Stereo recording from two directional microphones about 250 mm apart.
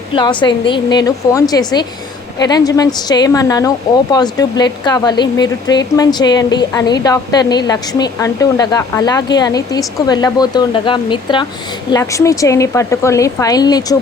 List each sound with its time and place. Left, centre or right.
0.1 s a woman's voice: centre